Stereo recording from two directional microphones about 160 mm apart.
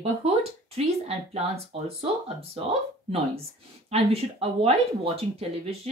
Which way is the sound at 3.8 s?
40° right (ahead or behind).